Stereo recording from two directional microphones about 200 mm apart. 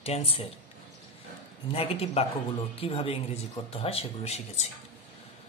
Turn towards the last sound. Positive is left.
turn(degrees=35)  # may be behind; listen again after turning